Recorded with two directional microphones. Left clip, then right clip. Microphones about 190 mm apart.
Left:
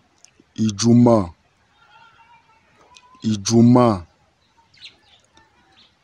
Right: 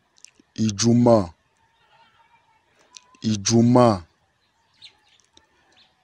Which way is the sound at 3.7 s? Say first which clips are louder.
Even; 20° right (ahead or behind).